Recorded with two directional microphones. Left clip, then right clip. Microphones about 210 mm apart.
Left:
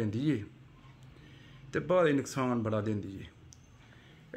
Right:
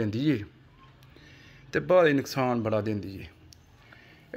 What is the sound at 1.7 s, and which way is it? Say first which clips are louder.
Speech: right 6 dB; 30° right (ahead or behind).